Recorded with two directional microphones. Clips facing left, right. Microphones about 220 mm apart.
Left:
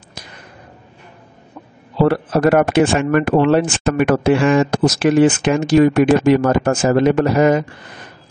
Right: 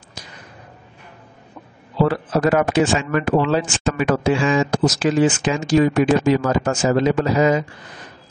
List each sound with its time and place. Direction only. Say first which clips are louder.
2.0 s speech: left 5 dB; 60° left (ahead or behind)